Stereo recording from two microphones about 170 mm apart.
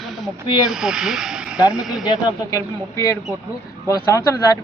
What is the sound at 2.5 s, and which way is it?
Speech, 20° left (ahead or behind).